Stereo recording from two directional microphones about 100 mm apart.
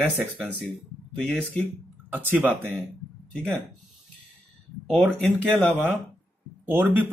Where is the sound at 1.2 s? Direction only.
5° left (ahead or behind).